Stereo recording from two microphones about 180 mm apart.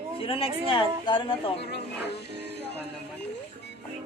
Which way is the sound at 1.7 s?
65° left (ahead or behind).